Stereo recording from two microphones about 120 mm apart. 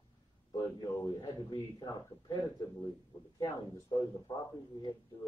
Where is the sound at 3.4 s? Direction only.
30° left (ahead or behind).